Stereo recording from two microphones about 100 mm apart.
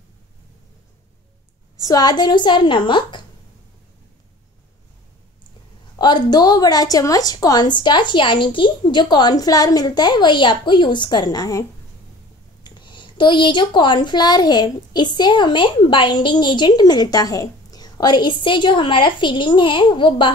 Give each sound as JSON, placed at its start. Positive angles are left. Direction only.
{"t": 1.8, "sound": "speech", "side_deg": 40}
{"t": 5.9, "sound": "speech", "side_deg": 45}
{"t": 12.6, "sound": "speech", "side_deg": 50}